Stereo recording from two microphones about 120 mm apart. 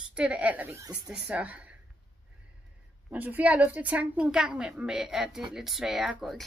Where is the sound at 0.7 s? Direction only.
25° right (ahead or behind).